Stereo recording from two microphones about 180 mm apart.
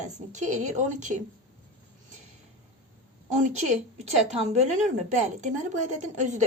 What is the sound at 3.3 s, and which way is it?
A woman's voice, 40° right (ahead or behind).